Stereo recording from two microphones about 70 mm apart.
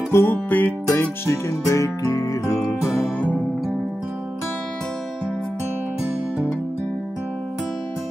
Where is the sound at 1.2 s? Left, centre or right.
Left.